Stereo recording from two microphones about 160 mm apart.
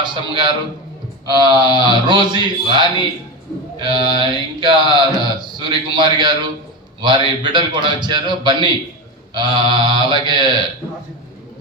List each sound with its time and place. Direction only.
0.0 s a man's voice: 30° right (ahead or behind)